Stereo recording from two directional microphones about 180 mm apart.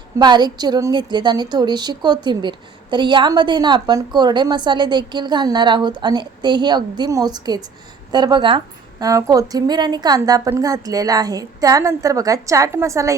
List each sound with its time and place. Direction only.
0.2 s a woman's voice: 25° right (ahead or behind)